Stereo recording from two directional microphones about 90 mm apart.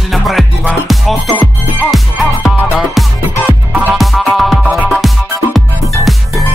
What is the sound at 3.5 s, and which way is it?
Music, 20° right (ahead or behind).